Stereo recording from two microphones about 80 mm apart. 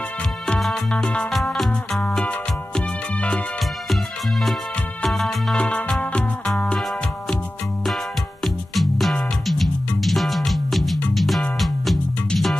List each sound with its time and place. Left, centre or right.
0.9 s music: centre
2.0 s music: centre
3.9 s music: centre
5.6 s music: centre
8.7 s music: centre